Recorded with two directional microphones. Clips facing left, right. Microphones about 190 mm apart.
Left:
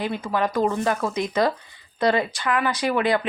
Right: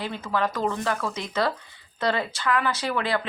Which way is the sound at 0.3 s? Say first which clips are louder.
Left 3 dB; 15° left (ahead or behind).